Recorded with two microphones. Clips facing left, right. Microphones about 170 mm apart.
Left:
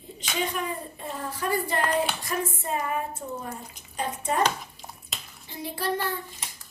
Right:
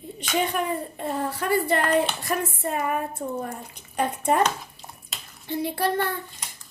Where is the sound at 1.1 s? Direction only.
65° right (ahead or behind).